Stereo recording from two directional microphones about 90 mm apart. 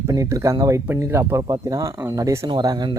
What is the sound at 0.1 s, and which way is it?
Speech, 40° right (ahead or behind).